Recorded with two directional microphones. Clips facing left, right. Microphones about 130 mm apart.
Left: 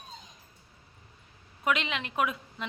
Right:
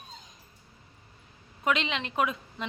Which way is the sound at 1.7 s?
5° left (ahead or behind).